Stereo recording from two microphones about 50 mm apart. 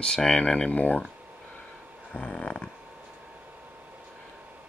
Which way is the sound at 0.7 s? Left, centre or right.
Left.